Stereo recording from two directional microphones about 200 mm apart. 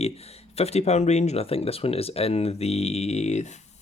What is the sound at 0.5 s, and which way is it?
Speech, 30° left (ahead or behind).